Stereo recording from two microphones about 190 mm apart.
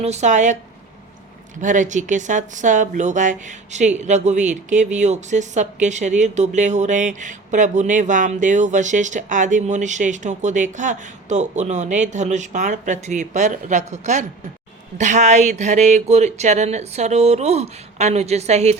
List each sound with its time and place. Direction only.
0.0 s speech: 35° right (ahead or behind)
1.6 s speech: 40° right (ahead or behind)